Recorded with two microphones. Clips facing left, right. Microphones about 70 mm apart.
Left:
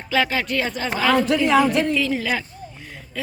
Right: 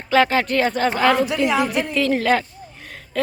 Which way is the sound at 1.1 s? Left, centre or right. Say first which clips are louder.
Left 2 dB; centre.